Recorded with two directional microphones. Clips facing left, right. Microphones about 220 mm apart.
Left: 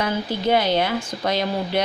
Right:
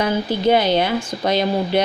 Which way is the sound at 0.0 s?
25° right (ahead or behind).